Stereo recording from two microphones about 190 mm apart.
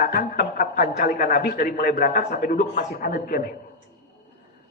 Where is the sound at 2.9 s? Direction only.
50° left (ahead or behind).